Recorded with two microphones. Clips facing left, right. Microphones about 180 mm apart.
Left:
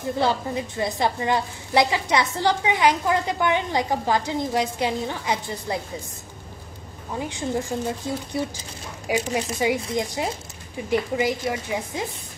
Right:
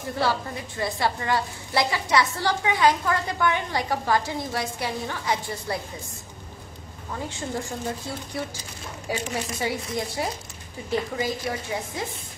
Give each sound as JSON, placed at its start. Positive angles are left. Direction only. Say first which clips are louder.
{"t": 0.2, "sound": "a woman's voice", "louder": "left 2 dB", "side_deg": 20}
{"t": 7.2, "sound": "a woman's voice", "louder": "left 5 dB", "side_deg": 15}